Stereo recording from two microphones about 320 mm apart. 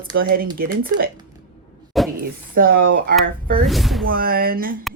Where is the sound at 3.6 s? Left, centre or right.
Centre.